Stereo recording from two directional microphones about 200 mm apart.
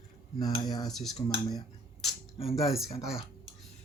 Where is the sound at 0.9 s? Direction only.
Centre (ahead or behind).